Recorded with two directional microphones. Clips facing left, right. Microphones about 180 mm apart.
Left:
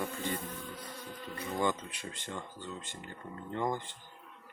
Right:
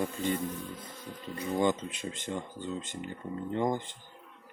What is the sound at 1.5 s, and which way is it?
Speech, 20° right (ahead or behind).